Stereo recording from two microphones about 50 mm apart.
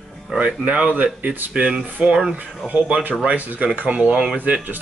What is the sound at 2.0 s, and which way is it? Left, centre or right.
Speech, centre.